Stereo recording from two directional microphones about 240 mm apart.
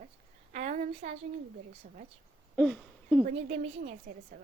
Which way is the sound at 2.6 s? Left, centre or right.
Centre.